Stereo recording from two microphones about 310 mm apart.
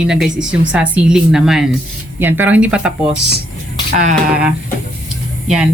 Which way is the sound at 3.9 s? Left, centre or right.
Right.